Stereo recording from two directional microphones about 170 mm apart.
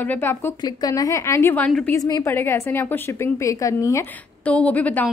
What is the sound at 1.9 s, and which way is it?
A woman's voice, 20° left (ahead or behind).